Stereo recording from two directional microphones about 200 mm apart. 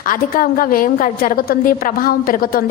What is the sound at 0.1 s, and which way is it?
A woman's voice, 45° left (ahead or behind).